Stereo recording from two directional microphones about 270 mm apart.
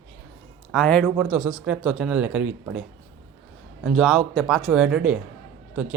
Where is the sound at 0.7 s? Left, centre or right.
Centre.